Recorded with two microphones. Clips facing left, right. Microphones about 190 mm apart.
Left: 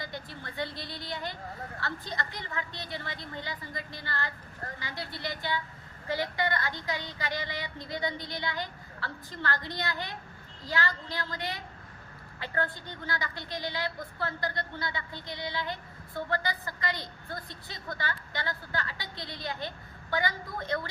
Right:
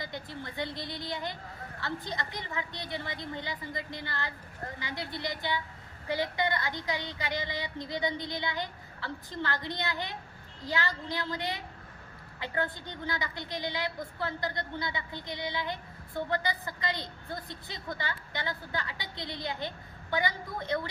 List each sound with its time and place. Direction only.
0.0 s a woman's voice: 20° right (ahead or behind)